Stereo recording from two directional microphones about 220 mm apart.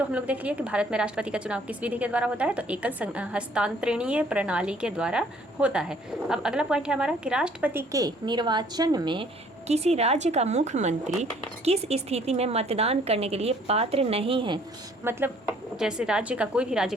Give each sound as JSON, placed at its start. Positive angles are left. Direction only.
{"t": 0.1, "sound": "a woman's voice", "side_deg": -5}
{"t": 15.0, "sound": "a woman's voice", "side_deg": -10}